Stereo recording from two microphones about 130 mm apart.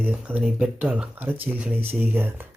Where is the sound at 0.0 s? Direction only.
10° right (ahead or behind).